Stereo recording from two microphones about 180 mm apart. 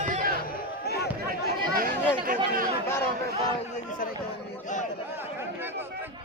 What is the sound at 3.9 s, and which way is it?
Speech, 50° left (ahead or behind).